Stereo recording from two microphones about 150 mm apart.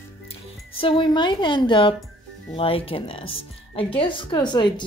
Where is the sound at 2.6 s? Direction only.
40° left (ahead or behind).